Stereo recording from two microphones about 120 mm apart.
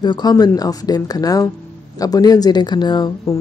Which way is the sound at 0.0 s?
35° left (ahead or behind).